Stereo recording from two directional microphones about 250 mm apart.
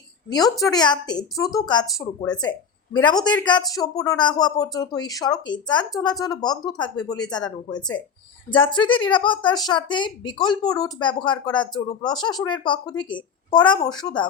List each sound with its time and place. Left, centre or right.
0.3 s a woman's voice: centre